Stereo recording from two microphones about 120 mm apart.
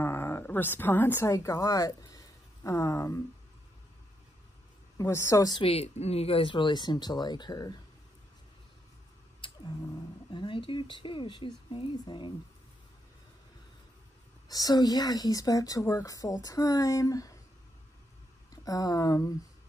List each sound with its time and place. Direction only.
0.0 s a woman's voice: 20° left (ahead or behind)
4.9 s a woman's voice: 25° left (ahead or behind)
5.5 s speech: 50° left (ahead or behind)
9.4 s a sound: 40° left (ahead or behind)
10.3 s speech: 45° left (ahead or behind)
14.5 s a woman's voice: 35° left (ahead or behind)
18.5 s speech: 30° left (ahead or behind)